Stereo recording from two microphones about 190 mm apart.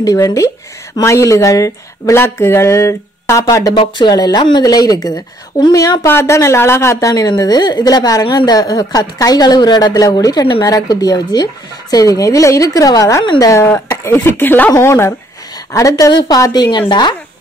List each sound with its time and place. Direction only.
0.0 s a woman's voice: 15° left (ahead or behind)